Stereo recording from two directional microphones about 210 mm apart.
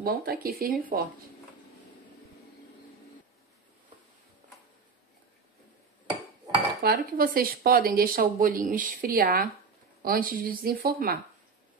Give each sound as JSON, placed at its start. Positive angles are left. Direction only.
{"t": 0.0, "sound": "speech", "side_deg": -45}
{"t": 6.8, "sound": "speech", "side_deg": -45}